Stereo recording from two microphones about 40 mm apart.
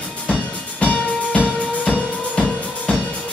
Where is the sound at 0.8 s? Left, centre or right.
Left.